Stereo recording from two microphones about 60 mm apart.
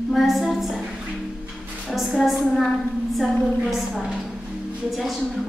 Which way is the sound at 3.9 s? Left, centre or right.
Centre.